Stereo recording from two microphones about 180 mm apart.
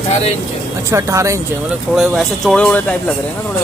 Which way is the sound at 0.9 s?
15° right (ahead or behind).